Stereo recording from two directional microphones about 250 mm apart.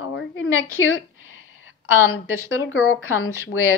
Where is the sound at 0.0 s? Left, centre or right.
Left.